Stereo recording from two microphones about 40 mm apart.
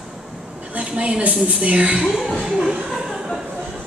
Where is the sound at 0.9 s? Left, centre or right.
Right.